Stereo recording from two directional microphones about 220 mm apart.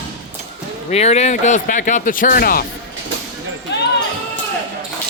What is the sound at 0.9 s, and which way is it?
Speech, 30° left (ahead or behind).